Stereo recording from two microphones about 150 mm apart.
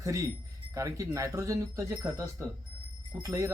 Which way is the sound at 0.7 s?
20° right (ahead or behind).